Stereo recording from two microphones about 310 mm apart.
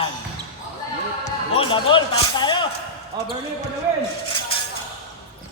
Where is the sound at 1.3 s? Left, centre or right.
Centre.